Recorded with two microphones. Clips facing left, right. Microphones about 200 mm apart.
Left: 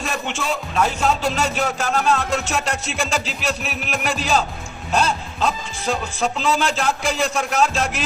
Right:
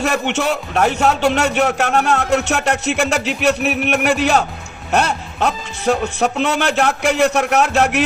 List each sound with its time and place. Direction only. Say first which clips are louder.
0.0 s speech: right 8 dB; 70° right (ahead or behind)